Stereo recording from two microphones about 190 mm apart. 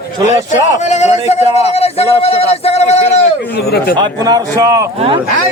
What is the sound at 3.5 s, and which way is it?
Speech, 55° left (ahead or behind).